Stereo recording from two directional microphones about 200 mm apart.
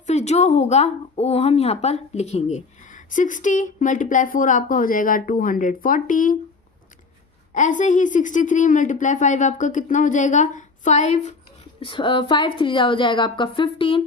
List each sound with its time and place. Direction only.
0.1 s speech: 35° left (ahead or behind)
7.5 s a woman's voice: 40° left (ahead or behind)